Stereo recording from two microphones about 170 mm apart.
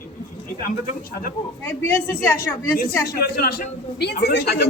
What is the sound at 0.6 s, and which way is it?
Speech, 55° left (ahead or behind).